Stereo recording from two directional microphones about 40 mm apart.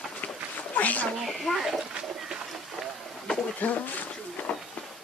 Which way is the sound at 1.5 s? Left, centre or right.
Centre.